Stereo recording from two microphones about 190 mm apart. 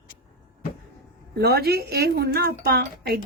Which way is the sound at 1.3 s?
55° right (ahead or behind).